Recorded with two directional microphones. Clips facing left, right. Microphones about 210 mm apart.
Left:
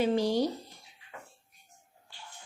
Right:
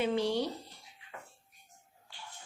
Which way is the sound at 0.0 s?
40° left (ahead or behind).